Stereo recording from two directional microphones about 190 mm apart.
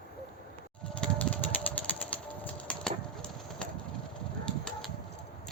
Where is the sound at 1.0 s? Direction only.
5° left (ahead or behind).